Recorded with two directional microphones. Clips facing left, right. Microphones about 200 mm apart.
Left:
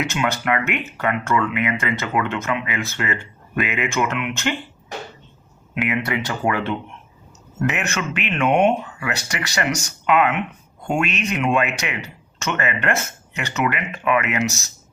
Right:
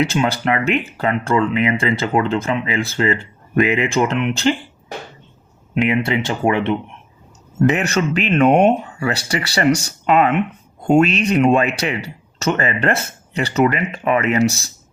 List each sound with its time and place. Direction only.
0.0 s speech: 30° right (ahead or behind)
5.7 s speech: 25° right (ahead or behind)
7.6 s speech: 35° right (ahead or behind)